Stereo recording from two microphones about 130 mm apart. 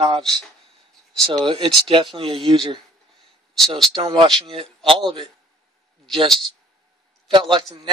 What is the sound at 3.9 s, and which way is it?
A man's voice, 40° right (ahead or behind).